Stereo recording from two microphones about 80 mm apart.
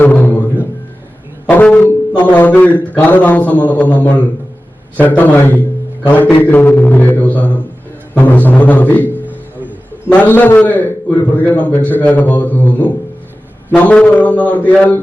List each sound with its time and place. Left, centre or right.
0.0 s music: left
1.5 s music: centre
2.9 s a man's voice: left